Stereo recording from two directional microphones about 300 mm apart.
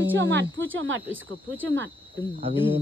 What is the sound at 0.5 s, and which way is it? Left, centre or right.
Speech, right.